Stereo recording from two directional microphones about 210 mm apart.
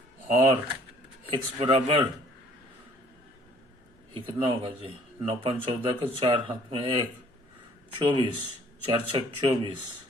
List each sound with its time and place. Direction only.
0.3 s speech: 25° right (ahead or behind)
4.1 s speech: 25° right (ahead or behind)